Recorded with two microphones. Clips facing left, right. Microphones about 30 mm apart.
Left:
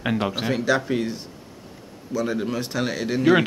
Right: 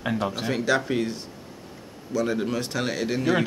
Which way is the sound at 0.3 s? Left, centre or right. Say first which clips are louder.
Left 3 dB; centre.